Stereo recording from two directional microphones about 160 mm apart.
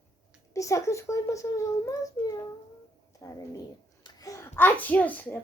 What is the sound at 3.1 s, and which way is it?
A child's voice, 20° left (ahead or behind).